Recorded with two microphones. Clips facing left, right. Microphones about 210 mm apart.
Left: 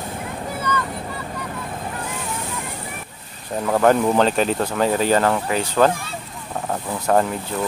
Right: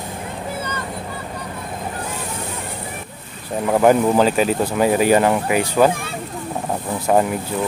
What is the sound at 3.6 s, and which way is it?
Speech, 10° right (ahead or behind).